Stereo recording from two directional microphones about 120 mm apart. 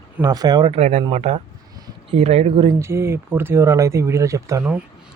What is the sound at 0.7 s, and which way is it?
Speech, 80° right.